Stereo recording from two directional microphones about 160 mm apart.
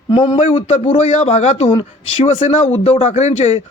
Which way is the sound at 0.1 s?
35° left (ahead or behind).